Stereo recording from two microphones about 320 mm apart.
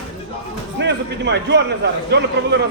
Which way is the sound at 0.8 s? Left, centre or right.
Right.